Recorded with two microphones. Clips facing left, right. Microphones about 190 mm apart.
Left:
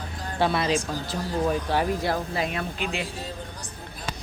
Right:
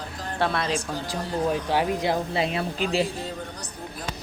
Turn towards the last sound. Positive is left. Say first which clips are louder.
# right 5 dB
turn(degrees=-35)  # may be behind; listen again after turning